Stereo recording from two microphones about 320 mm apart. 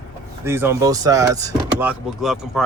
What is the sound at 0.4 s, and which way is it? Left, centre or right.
Speech, centre.